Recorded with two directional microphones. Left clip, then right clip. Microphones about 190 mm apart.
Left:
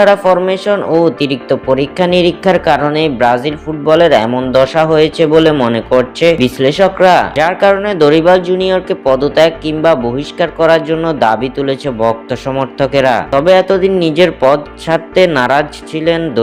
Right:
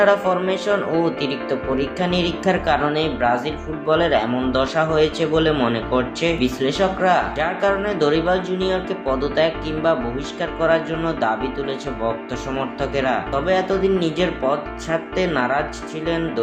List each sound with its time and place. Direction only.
0.0 s speech: 40° left (ahead or behind)